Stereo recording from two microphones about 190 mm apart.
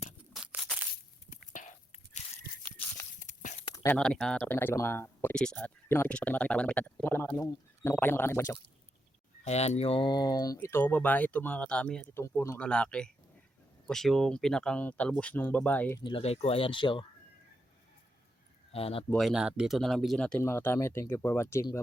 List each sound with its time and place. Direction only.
0.3 s crushing: 5° right (ahead or behind)
1.5 s a sound: 40° left (ahead or behind)
3.8 s speech: 5° left (ahead or behind)
9.4 s speech: 35° left (ahead or behind); by 16.0 s 10° left (ahead or behind)
16.0 s speech: 25° left (ahead or behind)
18.7 s speech: 30° left (ahead or behind)
19.1 s speech: centre (ahead or behind); by 21.8 s 15° left (ahead or behind)